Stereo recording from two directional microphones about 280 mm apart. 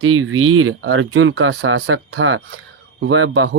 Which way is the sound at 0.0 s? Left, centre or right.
Right.